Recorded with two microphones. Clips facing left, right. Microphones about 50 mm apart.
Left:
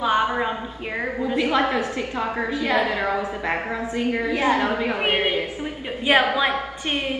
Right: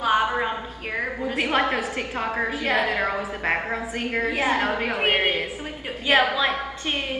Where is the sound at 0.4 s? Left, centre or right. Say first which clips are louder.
Left 1 dB; centre.